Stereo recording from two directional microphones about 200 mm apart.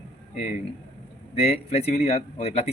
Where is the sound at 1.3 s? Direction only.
30° left (ahead or behind).